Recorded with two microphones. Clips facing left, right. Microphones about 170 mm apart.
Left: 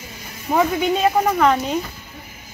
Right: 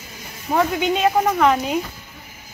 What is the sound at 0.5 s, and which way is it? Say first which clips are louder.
Speech: left 1 dB; centre (ahead or behind).